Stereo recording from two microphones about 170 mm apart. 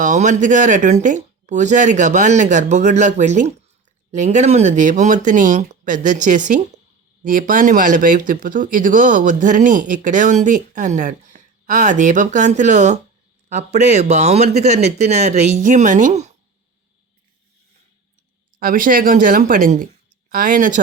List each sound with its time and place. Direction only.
0.0 s speech: 45° right (ahead or behind)
18.6 s speech: 55° right (ahead or behind)